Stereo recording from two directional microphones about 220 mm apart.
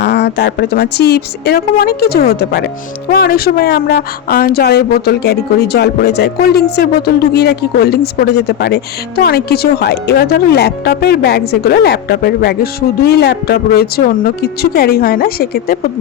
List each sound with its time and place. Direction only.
0.0 s speech: 50° left (ahead or behind)